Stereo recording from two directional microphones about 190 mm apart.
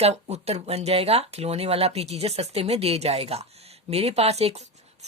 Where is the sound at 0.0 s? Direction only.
35° right (ahead or behind).